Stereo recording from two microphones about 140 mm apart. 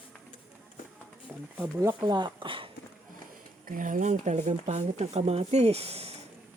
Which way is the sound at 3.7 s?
75° right (ahead or behind).